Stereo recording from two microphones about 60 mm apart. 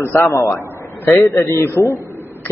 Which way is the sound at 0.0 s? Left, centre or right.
Left.